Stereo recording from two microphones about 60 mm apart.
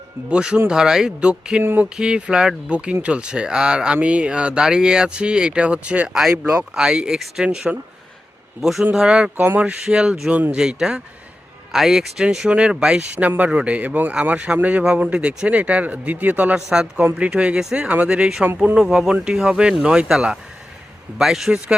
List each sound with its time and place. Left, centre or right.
0.3 s speech: centre
6.1 s a man's voice: centre
13.1 s speech: right
14.3 s speech: centre
16.6 s a man's voice: centre